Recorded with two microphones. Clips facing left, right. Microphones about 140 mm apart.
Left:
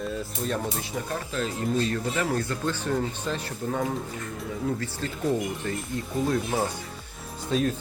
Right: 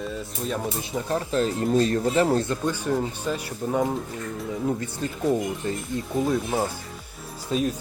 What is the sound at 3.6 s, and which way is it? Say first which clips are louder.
Speech: right 4 dB; 20° right (ahead or behind).